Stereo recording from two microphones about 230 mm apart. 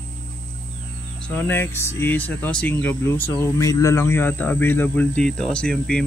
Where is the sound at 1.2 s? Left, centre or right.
Centre.